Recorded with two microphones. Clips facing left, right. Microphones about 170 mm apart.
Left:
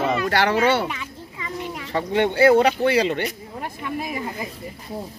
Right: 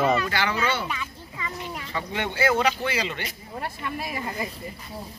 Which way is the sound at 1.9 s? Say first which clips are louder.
Left 10 dB; 55° left (ahead or behind).